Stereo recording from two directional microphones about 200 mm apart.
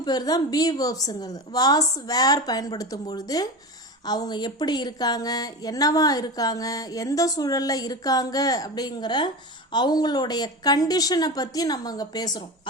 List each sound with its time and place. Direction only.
0.0 s speech: 20° left (ahead or behind)